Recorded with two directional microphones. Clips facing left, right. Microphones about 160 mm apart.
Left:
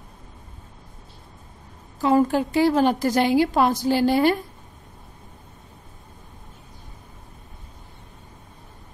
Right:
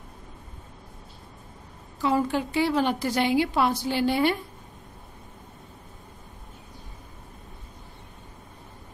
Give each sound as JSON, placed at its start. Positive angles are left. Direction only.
{"t": 2.0, "sound": "a woman's voice", "side_deg": 45}